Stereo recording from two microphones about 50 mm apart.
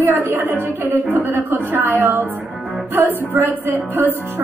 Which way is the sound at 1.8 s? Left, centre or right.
Right.